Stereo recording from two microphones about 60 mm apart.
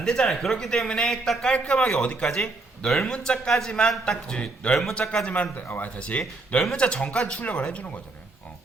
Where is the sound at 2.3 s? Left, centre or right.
Centre.